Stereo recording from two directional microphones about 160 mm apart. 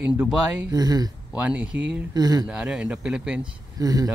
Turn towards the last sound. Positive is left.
turn(degrees=-25)  # may be behind; listen again after turning